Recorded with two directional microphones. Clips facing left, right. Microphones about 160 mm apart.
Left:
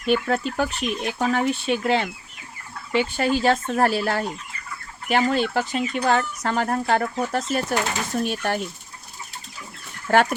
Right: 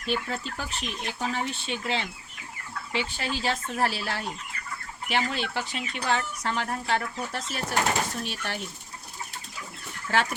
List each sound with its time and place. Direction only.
0.0 s speech: 55° left (ahead or behind)
10.1 s speech: 55° left (ahead or behind)